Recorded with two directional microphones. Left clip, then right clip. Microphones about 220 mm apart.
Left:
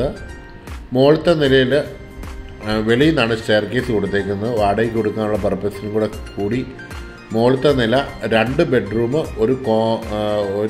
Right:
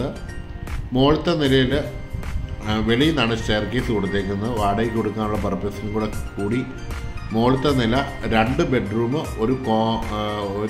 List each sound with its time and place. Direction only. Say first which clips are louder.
0.9 s speech: left 5 dB; 5° left (ahead or behind)